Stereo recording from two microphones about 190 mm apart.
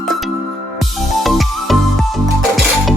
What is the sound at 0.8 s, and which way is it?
Music, centre (ahead or behind).